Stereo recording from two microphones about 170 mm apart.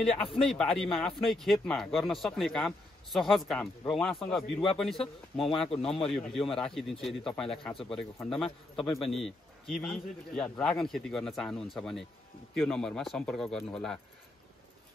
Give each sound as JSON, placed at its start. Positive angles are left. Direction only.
{"t": 0.2, "sound": "a man's voice", "side_deg": 5}
{"t": 5.0, "sound": "speech", "side_deg": 35}
{"t": 5.9, "sound": "a man's voice", "side_deg": 5}
{"t": 7.7, "sound": "speech", "side_deg": 30}
{"t": 8.7, "sound": "a man's voice", "side_deg": 0}